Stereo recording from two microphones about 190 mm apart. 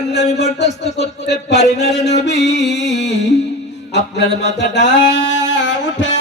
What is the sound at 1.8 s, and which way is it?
Music, 35° left (ahead or behind).